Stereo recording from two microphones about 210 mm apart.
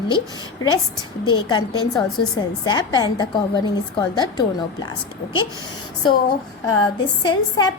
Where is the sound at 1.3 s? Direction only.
20° left (ahead or behind).